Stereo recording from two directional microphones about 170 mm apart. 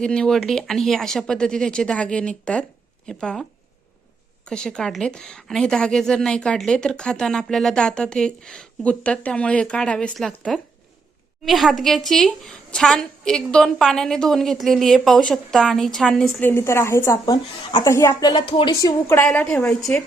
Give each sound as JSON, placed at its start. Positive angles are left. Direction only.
{"t": 0.0, "sound": "a woman's voice", "side_deg": 5}
{"t": 4.4, "sound": "a woman's voice", "side_deg": 5}
{"t": 18.7, "sound": "a woman's voice", "side_deg": 20}